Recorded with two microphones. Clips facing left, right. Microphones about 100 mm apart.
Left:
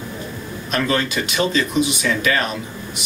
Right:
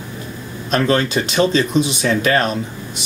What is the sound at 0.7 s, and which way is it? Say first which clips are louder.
Speech: right 4 dB; 35° right (ahead or behind).